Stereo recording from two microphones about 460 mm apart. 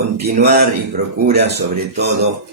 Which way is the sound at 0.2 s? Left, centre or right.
Centre.